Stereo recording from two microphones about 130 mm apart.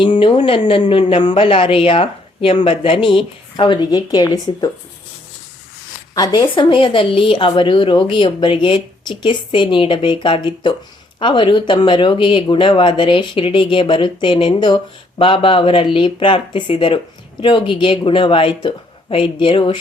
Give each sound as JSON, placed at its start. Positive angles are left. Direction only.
{"t": 0.0, "sound": "speech", "side_deg": 40}
{"t": 6.1, "sound": "speech", "side_deg": 30}